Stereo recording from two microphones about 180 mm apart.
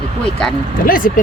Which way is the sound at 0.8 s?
50° left (ahead or behind).